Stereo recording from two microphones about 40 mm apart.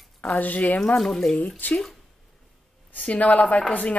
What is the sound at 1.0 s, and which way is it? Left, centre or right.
Speech, centre.